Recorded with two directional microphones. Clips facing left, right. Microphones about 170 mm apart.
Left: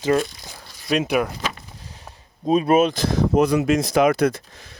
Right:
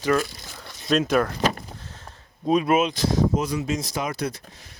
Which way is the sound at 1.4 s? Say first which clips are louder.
Right 6 dB; 45° right (ahead or behind).